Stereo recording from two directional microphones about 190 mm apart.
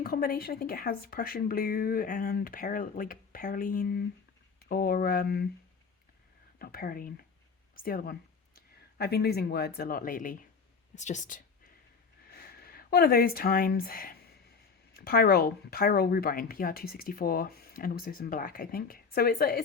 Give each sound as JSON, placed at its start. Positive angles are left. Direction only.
{"t": 0.0, "sound": "speech", "side_deg": 50}
{"t": 6.6, "sound": "speech", "side_deg": 50}
{"t": 12.3, "sound": "speech", "side_deg": 55}